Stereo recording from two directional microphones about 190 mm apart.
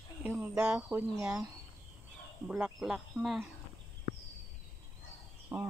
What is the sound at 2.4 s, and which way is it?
Speech, 5° right (ahead or behind).